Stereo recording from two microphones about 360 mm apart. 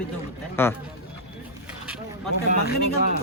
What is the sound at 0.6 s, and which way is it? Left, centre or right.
Speech, centre.